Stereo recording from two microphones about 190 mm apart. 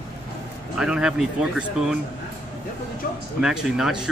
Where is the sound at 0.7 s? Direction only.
5° right (ahead or behind).